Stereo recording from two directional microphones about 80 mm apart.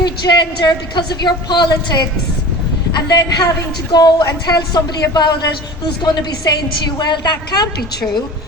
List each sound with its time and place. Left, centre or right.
0.0 s a woman's voice: left